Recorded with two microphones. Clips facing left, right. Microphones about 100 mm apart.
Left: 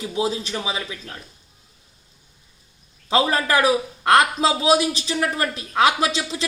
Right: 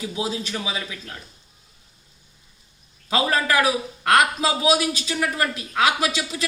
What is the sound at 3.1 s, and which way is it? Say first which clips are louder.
A man's voice: left 2 dB; 30° left (ahead or behind).